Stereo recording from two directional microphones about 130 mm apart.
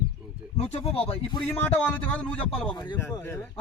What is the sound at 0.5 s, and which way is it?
Speech, 50° left (ahead or behind).